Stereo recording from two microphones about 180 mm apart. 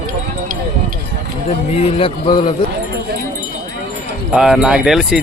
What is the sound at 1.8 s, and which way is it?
Speech, 30° left (ahead or behind).